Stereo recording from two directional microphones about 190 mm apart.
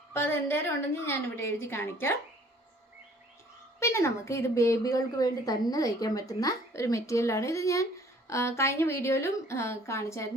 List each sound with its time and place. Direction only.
0.1 s a woman's voice: 15° left (ahead or behind)
3.8 s a woman's voice: 15° left (ahead or behind)